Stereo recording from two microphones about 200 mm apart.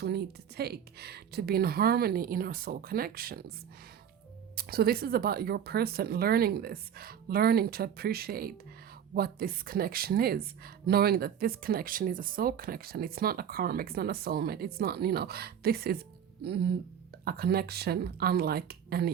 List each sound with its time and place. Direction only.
0.0 s speech: 55° right (ahead or behind)
4.5 s speech: 50° right (ahead or behind)